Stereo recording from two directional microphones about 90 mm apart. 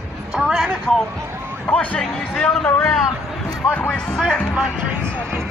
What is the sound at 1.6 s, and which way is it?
Speech, 15° left (ahead or behind).